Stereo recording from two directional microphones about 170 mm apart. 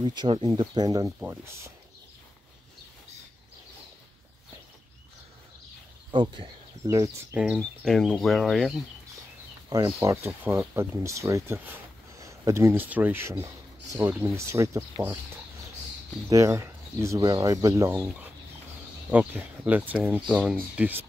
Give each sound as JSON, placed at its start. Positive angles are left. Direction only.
{"t": 0.0, "sound": "speech", "side_deg": -25}
{"t": 6.1, "sound": "speech", "side_deg": -30}
{"t": 7.5, "sound": "speech", "side_deg": 5}
{"t": 9.7, "sound": "speech", "side_deg": -20}
{"t": 16.3, "sound": "speech", "side_deg": -20}